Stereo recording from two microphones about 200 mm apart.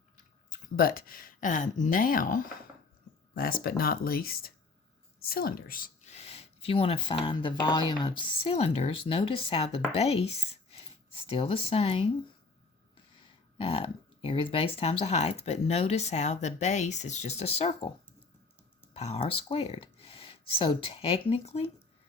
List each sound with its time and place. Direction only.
0.8 s speech: 45° left (ahead or behind); by 12.1 s 25° left (ahead or behind)
13.6 s speech: 30° left (ahead or behind)
18.9 s speech: 30° left (ahead or behind)